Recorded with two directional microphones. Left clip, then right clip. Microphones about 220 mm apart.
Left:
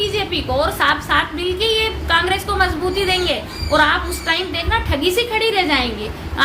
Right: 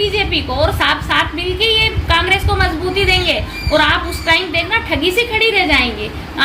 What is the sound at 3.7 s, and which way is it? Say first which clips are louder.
A woman's voice: right 2 dB; 15° left (ahead or behind).